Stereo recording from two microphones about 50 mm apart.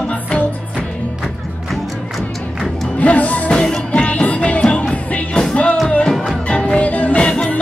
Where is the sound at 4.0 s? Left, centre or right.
Left.